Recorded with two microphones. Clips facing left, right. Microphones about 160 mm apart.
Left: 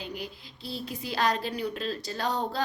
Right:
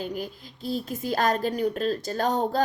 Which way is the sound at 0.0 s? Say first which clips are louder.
Right 6 dB; 45° right (ahead or behind).